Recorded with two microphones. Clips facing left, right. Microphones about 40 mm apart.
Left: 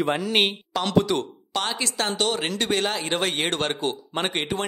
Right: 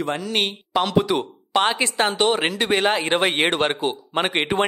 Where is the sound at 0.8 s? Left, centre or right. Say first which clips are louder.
Right 1 dB; centre.